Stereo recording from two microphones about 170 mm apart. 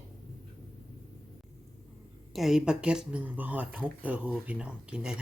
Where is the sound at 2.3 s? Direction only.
Centre (ahead or behind).